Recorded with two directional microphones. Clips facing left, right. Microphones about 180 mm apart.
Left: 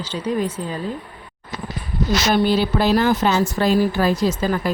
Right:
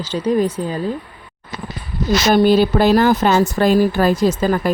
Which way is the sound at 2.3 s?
45° right (ahead or behind).